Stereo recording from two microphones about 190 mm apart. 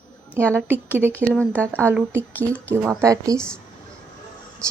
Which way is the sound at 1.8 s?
10° right (ahead or behind).